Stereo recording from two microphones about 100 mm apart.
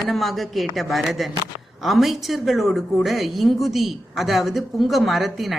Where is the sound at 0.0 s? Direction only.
Centre (ahead or behind).